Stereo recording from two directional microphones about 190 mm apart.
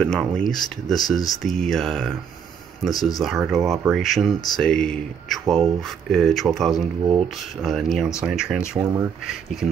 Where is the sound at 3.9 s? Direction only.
Centre (ahead or behind).